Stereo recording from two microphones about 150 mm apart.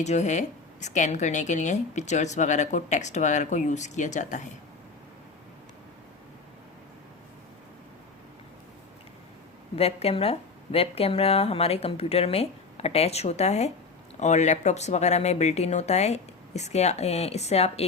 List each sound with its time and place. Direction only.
0.0 s a woman's voice: 50° left (ahead or behind)
9.7 s a woman's voice: 40° left (ahead or behind)